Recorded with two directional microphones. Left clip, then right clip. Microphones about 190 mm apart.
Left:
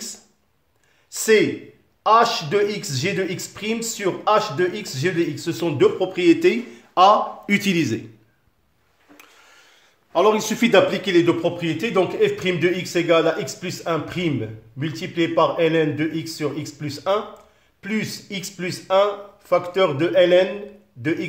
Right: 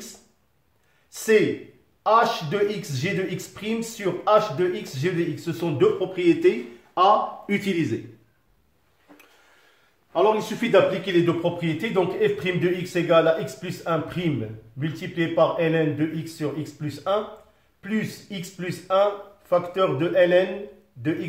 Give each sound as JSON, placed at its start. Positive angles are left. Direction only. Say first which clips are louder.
{"t": 1.1, "sound": "a sound", "louder": "left 3 dB", "side_deg": 40}
{"t": 2.0, "sound": "a man's voice", "louder": "left 3 dB", "side_deg": 40}
{"t": 10.1, "sound": "a man's voice", "louder": "left 3 dB", "side_deg": 60}